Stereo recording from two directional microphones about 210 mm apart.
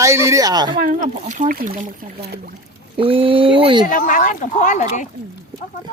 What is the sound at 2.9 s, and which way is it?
Speech, 25° right (ahead or behind).